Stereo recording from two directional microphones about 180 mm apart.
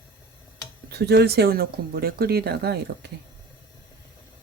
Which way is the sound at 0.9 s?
65° right (ahead or behind).